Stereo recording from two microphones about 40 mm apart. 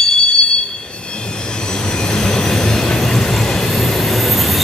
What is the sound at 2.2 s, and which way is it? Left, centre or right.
Train, centre.